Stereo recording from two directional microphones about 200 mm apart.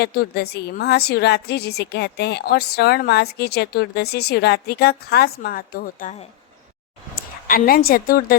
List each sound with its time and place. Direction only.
0.0 s a woman's voice: 50° left (ahead or behind)
7.4 s a woman's voice: 45° left (ahead or behind)